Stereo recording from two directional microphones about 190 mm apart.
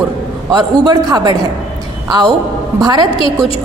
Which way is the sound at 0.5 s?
20° right (ahead or behind).